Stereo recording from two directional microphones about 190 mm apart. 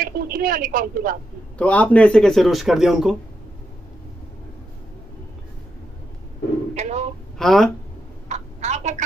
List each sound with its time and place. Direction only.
0.0 s a woman's voice: 50° right (ahead or behind)
1.6 s speech: 5° left (ahead or behind)
6.7 s telephone: 35° right (ahead or behind)
7.3 s speech: centre (ahead or behind)
8.3 s a sound: 35° right (ahead or behind)